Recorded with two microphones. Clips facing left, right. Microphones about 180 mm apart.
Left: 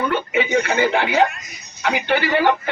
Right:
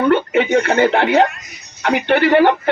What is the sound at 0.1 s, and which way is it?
Speech, 60° right (ahead or behind).